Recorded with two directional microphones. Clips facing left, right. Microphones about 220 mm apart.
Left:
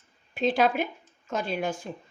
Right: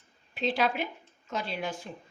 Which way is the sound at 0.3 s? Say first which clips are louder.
Left 5 dB; 50° left (ahead or behind).